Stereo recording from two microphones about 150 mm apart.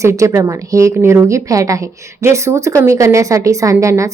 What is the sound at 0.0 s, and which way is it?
Speech, 20° right (ahead or behind).